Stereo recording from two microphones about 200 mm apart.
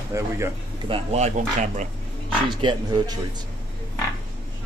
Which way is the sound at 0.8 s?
30° right (ahead or behind).